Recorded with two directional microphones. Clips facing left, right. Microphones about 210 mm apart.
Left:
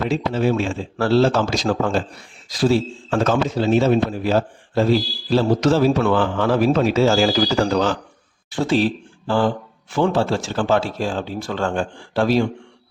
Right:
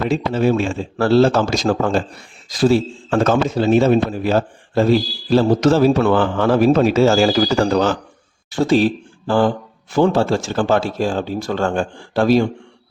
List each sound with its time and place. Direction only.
0.1 s a man's voice: 45° right (ahead or behind)